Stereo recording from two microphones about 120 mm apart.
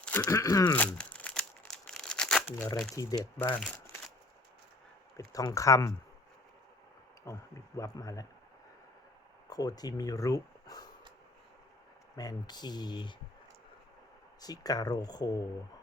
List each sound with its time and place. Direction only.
0.0 s a sound: 10° left (ahead or behind)
0.3 s speech: 25° left (ahead or behind)
0.8 s crumpling: 10° left (ahead or behind)
2.9 s speech: 30° left (ahead or behind)
3.3 s speech: 20° left (ahead or behind)
5.1 s speech: 30° left (ahead or behind)
7.3 s speech: 25° left (ahead or behind)
9.5 s speech: 30° left (ahead or behind)
12.1 s speech: 35° left (ahead or behind)
14.4 s speech: 35° left (ahead or behind)